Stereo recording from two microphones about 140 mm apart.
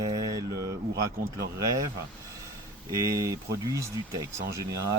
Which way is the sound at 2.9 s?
25° right (ahead or behind).